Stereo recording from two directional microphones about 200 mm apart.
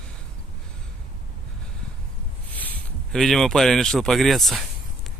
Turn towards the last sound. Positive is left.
turn(degrees=0)  # may be behind; listen again after turning